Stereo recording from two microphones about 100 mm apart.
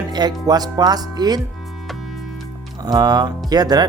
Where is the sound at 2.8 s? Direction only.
45° right (ahead or behind).